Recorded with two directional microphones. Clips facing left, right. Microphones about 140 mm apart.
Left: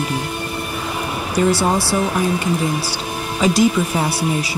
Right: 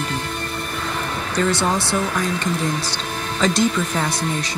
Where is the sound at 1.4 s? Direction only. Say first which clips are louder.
Left 4 dB; 5° left (ahead or behind).